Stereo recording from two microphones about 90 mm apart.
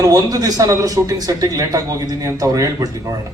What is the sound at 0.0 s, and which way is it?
Speech, 45° right (ahead or behind).